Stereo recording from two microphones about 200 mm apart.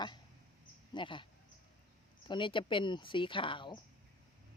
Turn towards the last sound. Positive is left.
turn(degrees=25)  # may be behind; listen again after turning